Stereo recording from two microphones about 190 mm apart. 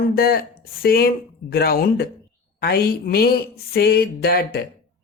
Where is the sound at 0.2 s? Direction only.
50° left (ahead or behind).